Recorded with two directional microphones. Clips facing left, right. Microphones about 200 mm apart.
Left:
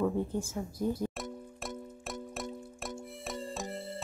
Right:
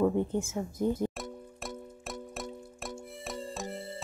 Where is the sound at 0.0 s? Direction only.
25° right (ahead or behind).